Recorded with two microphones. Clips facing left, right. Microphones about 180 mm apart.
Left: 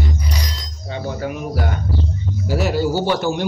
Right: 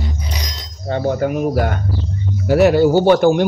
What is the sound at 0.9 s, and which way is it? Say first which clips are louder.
Speech: right 7 dB; 50° right (ahead or behind).